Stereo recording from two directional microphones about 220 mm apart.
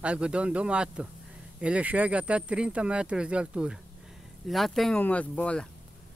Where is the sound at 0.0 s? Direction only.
5° right (ahead or behind).